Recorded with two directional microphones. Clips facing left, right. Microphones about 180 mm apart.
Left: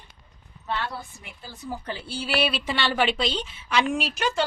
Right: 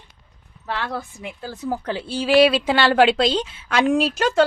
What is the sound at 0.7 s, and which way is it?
A woman's voice, 90° right.